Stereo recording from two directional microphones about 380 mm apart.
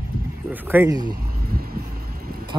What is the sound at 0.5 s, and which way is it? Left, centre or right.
Speech, centre.